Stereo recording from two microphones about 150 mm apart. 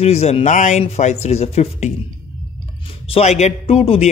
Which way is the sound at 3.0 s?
45° left (ahead or behind).